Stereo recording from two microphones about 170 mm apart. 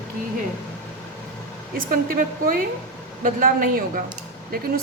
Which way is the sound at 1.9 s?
55° right (ahead or behind).